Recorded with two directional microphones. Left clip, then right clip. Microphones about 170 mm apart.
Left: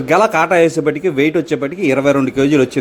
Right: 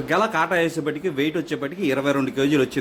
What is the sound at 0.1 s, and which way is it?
A man's voice, 35° left (ahead or behind).